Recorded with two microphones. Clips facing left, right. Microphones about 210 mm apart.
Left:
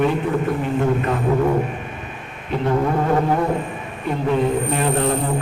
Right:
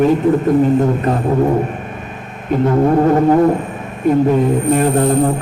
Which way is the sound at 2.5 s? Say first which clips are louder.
Right 8 dB; 45° right (ahead or behind).